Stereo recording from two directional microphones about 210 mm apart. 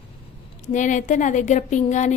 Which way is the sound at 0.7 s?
35° left (ahead or behind).